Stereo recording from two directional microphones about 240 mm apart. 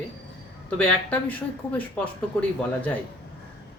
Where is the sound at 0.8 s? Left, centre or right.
Centre.